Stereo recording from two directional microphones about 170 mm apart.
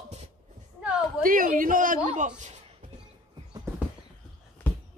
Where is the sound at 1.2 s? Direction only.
55° right (ahead or behind).